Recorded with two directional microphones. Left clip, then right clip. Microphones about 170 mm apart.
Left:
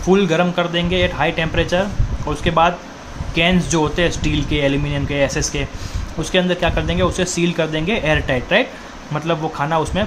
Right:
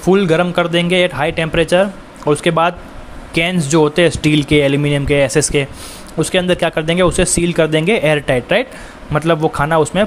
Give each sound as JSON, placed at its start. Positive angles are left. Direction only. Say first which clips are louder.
{"t": 0.0, "sound": "speech", "louder": "right 3 dB", "side_deg": -40}